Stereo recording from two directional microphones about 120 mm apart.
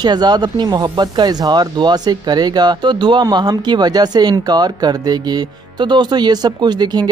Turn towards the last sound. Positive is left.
turn(degrees=-35)  # may be behind; listen again after turning